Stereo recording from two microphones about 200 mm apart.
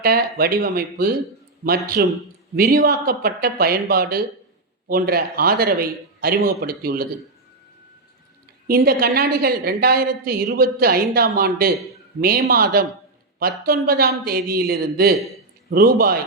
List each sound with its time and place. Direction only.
0.0 s a woman's voice: 50° right (ahead or behind)
8.6 s a woman's voice: 50° right (ahead or behind)
13.8 s a woman's voice: 50° right (ahead or behind)